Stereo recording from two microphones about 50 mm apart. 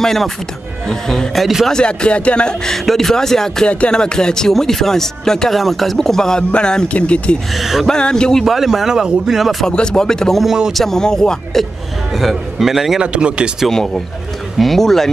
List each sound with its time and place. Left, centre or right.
0.0 s a man's voice: centre
1.7 s speech: centre
7.5 s a man's voice: centre
7.9 s speech: centre
8.5 s a man's voice: centre
9.7 s speech: centre
10.4 s speech: centre
10.7 s speech: centre
12.1 s a man's voice: centre
13.0 s speech: right
13.7 s speech: centre